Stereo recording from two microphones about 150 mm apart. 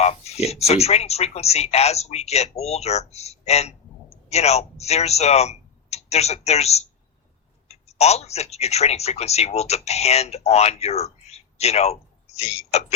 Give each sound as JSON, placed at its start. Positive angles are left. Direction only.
{"t": 0.0, "sound": "speech", "side_deg": 45}